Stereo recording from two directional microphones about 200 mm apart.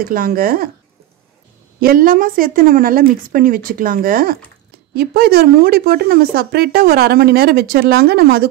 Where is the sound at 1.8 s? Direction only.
45° right (ahead or behind).